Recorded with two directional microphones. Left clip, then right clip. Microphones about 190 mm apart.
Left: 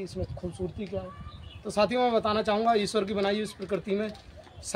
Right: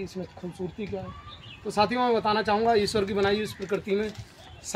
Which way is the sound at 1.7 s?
35° left (ahead or behind).